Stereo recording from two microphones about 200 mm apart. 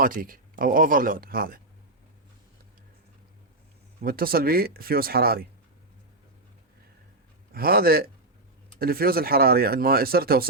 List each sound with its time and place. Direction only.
0.0 s speech: 45° right (ahead or behind)
4.0 s speech: 45° right (ahead or behind)
7.5 s speech: 50° right (ahead or behind)